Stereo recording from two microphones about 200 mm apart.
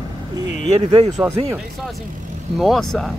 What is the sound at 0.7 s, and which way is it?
Speech, 30° right (ahead or behind).